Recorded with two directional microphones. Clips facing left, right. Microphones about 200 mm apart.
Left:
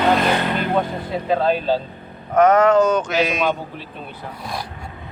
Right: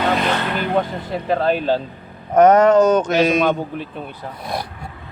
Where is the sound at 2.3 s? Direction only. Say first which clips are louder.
Right 2 dB; 40° right (ahead or behind).